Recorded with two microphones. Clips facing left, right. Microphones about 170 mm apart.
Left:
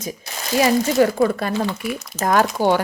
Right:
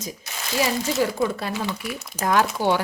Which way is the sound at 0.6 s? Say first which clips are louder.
Left 7 dB; 65° left (ahead or behind).